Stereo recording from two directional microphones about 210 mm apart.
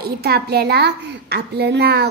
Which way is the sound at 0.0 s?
50° right (ahead or behind).